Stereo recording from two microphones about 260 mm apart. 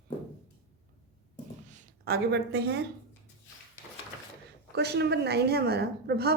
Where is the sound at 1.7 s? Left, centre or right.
Right.